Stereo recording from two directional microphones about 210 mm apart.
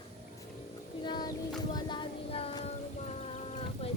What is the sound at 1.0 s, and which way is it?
Child singing, 20° left (ahead or behind).